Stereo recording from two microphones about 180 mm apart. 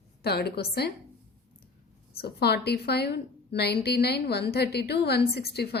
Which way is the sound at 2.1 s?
60° left (ahead or behind).